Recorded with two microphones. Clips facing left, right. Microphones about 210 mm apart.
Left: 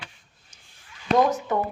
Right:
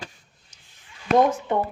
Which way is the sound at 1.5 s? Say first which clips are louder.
Right 1 dB; 25° right (ahead or behind).